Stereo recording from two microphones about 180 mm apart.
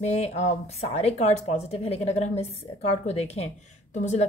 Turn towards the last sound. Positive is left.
turn(degrees=40)  # may be behind; listen again after turning